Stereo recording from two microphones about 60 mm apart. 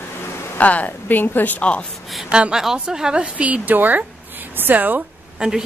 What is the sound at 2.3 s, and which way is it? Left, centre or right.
A woman's voice, centre.